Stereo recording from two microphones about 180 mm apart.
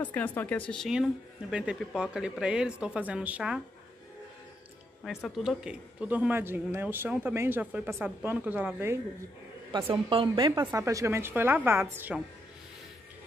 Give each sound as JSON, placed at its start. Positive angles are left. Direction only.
{"t": 0.0, "sound": "speech", "side_deg": 10}
{"t": 5.0, "sound": "speech", "side_deg": 0}
{"t": 9.7, "sound": "speech", "side_deg": -25}